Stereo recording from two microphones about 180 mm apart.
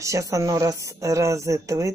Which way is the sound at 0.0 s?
15° right (ahead or behind).